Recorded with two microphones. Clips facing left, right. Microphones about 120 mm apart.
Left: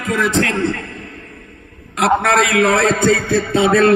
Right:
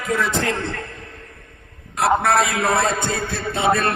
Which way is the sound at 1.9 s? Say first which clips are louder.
Left 3 dB; 85° left.